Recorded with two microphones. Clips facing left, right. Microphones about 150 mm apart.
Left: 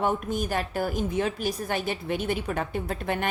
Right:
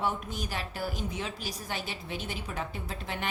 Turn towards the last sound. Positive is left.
turn(degrees=55)  # may be behind; listen again after turning